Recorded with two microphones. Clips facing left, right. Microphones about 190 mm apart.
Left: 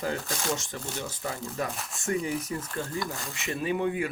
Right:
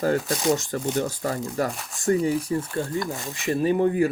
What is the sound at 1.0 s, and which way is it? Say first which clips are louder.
Speech: right 7 dB; 45° right (ahead or behind).